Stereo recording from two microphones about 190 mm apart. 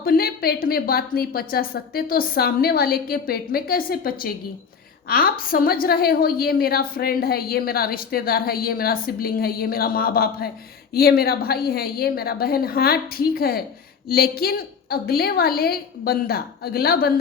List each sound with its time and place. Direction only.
0.0 s a woman's voice: 50° left (ahead or behind)